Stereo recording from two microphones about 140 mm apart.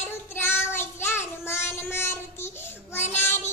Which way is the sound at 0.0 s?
15° left (ahead or behind).